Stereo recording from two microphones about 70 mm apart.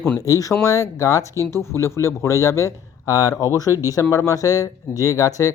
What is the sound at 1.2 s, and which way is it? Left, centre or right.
Speech, right.